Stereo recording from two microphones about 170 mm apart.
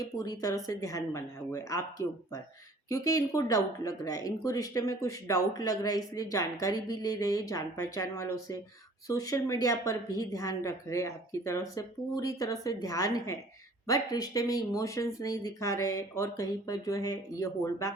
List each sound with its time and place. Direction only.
0.2 s speech: 20° left (ahead or behind)